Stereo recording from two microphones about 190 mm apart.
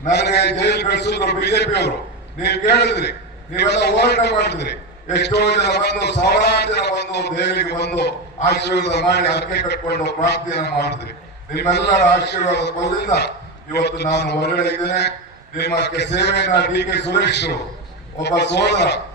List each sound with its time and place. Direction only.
0.1 s a man's voice: 60° left (ahead or behind)